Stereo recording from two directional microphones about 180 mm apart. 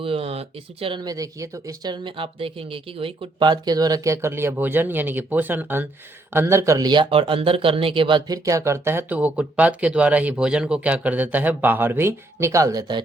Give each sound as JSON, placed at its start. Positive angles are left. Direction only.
{"t": 0.0, "sound": "speech", "side_deg": -35}